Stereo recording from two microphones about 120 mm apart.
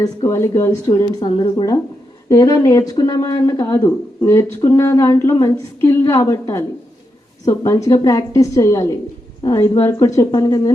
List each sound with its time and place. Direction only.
0.0 s speech: 25° left (ahead or behind)
1.2 s a woman's voice: 40° left (ahead or behind)